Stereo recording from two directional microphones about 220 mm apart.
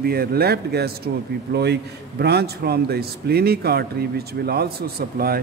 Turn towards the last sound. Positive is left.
turn(degrees=-45)  # may be behind; listen again after turning